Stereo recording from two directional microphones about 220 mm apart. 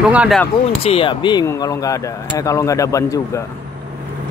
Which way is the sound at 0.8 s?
25° left (ahead or behind).